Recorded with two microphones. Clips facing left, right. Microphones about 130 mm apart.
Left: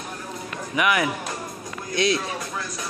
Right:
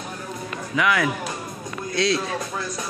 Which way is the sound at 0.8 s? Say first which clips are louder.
Right 1 dB; 20° left (ahead or behind).